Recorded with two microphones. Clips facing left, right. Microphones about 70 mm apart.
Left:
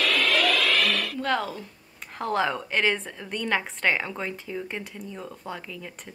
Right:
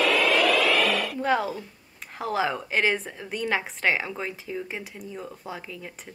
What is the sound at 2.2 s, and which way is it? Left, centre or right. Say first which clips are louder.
A woman's voice: left 1 dB; centre.